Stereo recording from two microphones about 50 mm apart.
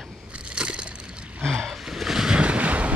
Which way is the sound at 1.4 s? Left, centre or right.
Centre.